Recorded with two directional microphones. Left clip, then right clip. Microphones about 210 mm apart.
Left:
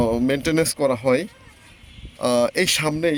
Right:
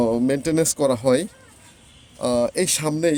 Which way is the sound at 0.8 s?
20° right (ahead or behind).